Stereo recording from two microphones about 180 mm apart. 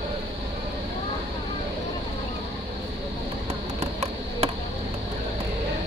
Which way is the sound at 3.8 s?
35° right (ahead or behind).